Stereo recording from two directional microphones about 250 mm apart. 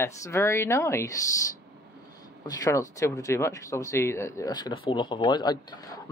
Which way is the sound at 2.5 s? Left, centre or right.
Centre.